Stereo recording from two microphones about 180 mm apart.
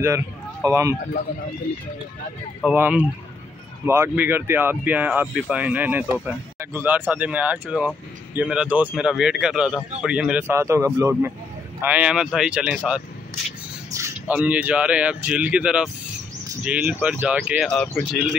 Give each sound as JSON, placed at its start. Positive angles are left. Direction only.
{"t": 0.7, "sound": "speech", "side_deg": -15}
{"t": 2.6, "sound": "a man's voice", "side_deg": -10}
{"t": 10.5, "sound": "speech", "side_deg": -15}
{"t": 17.6, "sound": "speech", "side_deg": 5}